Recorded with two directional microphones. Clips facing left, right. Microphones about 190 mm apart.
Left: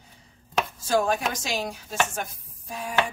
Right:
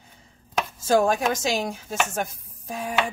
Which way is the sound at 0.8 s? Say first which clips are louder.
Right 5 dB; 45° right (ahead or behind).